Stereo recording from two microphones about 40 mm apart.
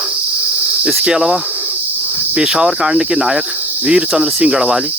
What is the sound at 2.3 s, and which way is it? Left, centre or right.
Cricket, centre.